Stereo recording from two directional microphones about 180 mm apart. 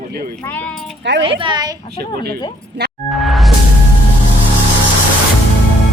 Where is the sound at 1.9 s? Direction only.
60° right (ahead or behind).